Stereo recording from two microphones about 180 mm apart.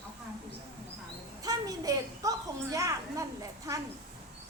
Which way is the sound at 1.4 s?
20° right (ahead or behind).